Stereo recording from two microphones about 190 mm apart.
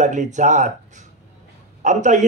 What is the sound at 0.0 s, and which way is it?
Speech, 40° right (ahead or behind).